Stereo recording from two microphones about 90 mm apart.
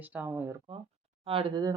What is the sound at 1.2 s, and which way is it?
Speech, 80° right.